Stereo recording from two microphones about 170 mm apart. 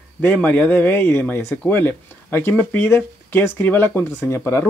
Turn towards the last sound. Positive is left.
turn(degrees=15)  # may be behind; listen again after turning